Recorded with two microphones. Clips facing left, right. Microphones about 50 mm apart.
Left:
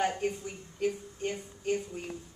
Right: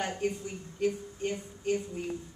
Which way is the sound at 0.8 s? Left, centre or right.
Centre.